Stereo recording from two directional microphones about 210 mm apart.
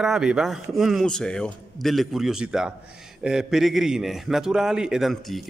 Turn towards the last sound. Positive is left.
turn(degrees=0)  # may be behind; listen again after turning